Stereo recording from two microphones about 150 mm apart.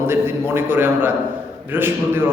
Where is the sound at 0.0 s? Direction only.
15° right (ahead or behind).